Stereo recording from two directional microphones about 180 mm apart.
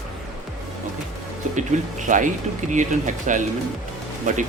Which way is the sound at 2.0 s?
45° right (ahead or behind).